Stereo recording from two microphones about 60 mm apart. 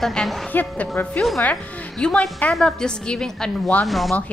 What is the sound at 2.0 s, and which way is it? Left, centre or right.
A woman's voice, centre.